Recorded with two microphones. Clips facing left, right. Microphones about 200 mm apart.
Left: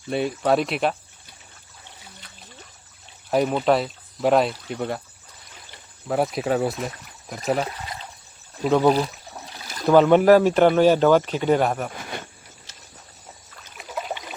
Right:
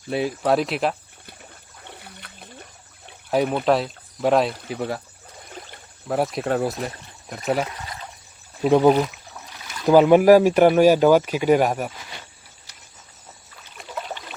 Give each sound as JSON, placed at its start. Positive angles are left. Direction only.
{"t": 0.1, "sound": "speech", "side_deg": 0}
{"t": 1.8, "sound": "water", "side_deg": -60}
{"t": 3.2, "sound": "speech", "side_deg": 0}
{"t": 6.1, "sound": "speech", "side_deg": 0}
{"t": 8.9, "sound": "a sound", "side_deg": 35}
{"t": 9.8, "sound": "speech", "side_deg": -10}
{"t": 11.9, "sound": "cricket", "side_deg": 55}
{"t": 13.7, "sound": "a sound", "side_deg": 5}